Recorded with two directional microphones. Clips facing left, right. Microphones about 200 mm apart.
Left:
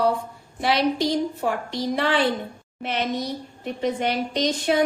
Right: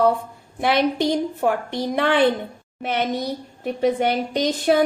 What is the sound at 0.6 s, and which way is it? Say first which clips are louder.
A woman's voice: right 2 dB; 55° right (ahead or behind).